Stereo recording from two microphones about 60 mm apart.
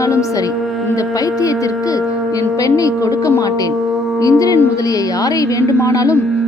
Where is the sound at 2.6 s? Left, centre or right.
Left.